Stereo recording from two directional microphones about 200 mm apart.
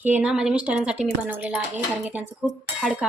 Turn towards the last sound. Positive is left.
turn(degrees=-5)  # may be behind; listen again after turning